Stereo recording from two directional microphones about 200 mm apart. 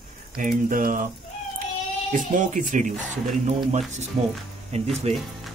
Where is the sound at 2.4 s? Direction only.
40° right (ahead or behind).